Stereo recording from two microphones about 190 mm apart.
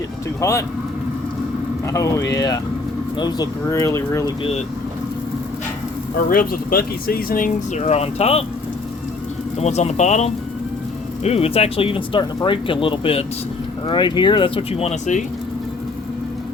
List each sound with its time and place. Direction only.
0.4 s speech: 15° left (ahead or behind)
1.9 s speech: 15° left (ahead or behind)
6.3 s speech: 50° left (ahead or behind); by 8.4 s 30° left (ahead or behind)
9.6 s speech: 35° left (ahead or behind)